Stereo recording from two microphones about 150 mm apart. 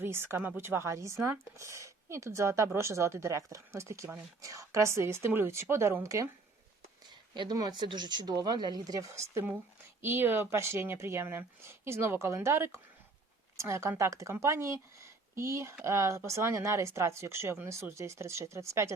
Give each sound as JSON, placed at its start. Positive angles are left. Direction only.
{"t": 0.0, "sound": "a woman's voice", "side_deg": -15}
{"t": 7.3, "sound": "a woman's voice", "side_deg": -25}